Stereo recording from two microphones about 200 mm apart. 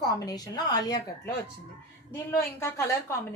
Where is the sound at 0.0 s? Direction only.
20° left (ahead or behind).